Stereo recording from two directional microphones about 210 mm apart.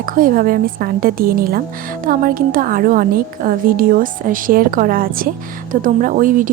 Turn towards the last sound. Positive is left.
turn(degrees=-40)  # may be behind; listen again after turning